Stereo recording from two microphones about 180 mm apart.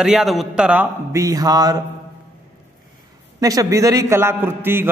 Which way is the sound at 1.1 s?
20° right (ahead or behind).